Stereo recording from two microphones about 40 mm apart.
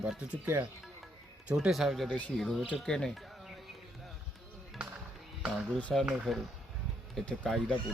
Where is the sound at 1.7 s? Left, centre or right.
Centre.